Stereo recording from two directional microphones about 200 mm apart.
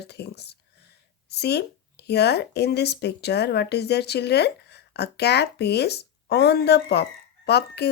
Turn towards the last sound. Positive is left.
turn(degrees=55)  # may be behind; listen again after turning